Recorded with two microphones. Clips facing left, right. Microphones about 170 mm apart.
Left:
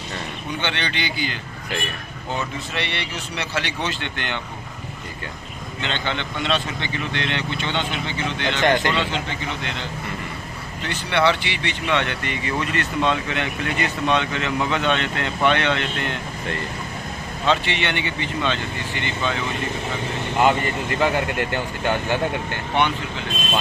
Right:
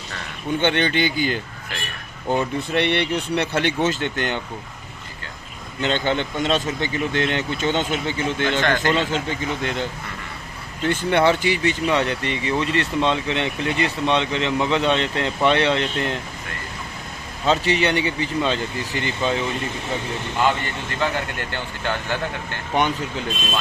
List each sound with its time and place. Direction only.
0.6 s speech: 50° right (ahead or behind)
5.8 s speech: 45° right (ahead or behind)
8.5 s a man's voice: 20° left (ahead or behind)
8.9 s speech: 45° right (ahead or behind)
10.9 s speech: 50° right (ahead or behind); by 16.2 s 35° right (ahead or behind)
17.5 s speech: 40° right (ahead or behind)
21.0 s speech: 15° left (ahead or behind)